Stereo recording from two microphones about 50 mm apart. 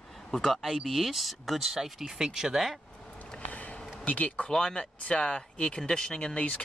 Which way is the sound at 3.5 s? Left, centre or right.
Left.